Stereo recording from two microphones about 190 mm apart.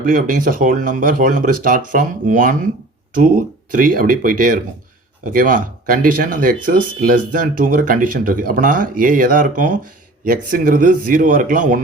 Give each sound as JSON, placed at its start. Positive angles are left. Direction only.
{"t": 0.0, "sound": "speech", "side_deg": -45}